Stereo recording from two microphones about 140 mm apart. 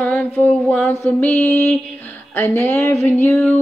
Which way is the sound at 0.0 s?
10° left (ahead or behind).